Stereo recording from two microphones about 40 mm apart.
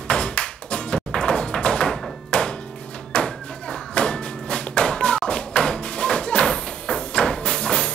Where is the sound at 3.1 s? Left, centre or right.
Left.